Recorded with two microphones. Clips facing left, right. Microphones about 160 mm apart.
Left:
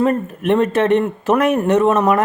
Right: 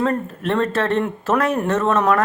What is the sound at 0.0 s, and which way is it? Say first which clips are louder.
A man's voice: left 4 dB; 15° left (ahead or behind).